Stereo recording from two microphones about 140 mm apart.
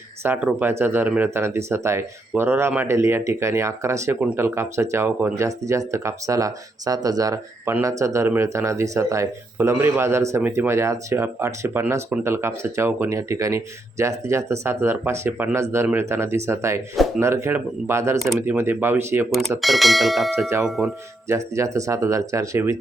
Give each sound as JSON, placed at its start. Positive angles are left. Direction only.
{"t": 0.2, "sound": "speech", "side_deg": -15}
{"t": 19.6, "sound": "speech", "side_deg": 0}
{"t": 21.2, "sound": "speech", "side_deg": -20}